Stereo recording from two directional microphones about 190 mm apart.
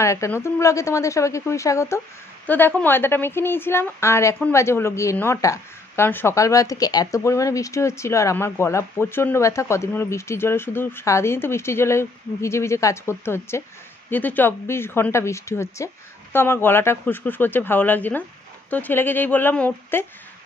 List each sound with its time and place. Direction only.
0.0 s a woman's voice: 15° left (ahead or behind)